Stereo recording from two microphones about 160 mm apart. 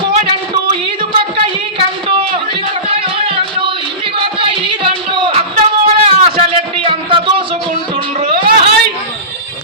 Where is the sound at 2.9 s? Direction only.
35° right (ahead or behind).